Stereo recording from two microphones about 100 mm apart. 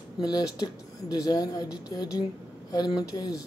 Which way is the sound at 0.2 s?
40° left (ahead or behind).